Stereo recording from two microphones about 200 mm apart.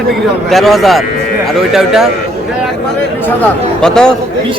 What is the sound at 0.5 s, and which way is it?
A man's voice, centre (ahead or behind).